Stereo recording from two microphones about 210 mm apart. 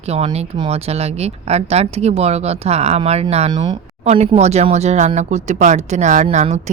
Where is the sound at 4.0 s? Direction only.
30° right (ahead or behind).